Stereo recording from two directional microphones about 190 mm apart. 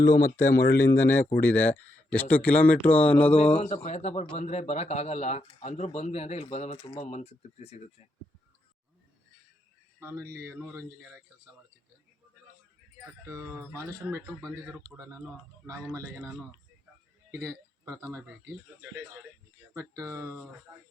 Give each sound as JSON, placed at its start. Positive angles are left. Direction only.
{"t": 0.0, "sound": "speech", "side_deg": 15}
{"t": 3.8, "sound": "speech", "side_deg": 35}
{"t": 10.0, "sound": "speech", "side_deg": -10}
{"t": 13.2, "sound": "speech", "side_deg": -15}
{"t": 14.4, "sound": "speech", "side_deg": 5}
{"t": 15.6, "sound": "speech", "side_deg": -15}
{"t": 17.4, "sound": "speech", "side_deg": -15}